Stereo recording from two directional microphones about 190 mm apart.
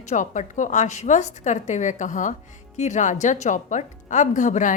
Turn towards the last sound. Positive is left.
turn(degrees=40)  # may be behind; listen again after turning